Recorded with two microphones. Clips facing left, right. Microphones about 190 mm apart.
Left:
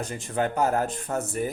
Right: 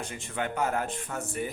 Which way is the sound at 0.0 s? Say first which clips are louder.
Left 6 dB; 40° left (ahead or behind).